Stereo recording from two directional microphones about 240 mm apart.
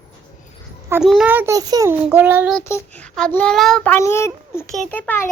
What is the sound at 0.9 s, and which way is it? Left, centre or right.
A child's voice, centre.